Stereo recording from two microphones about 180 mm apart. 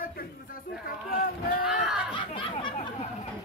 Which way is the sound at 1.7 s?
5° right (ahead or behind).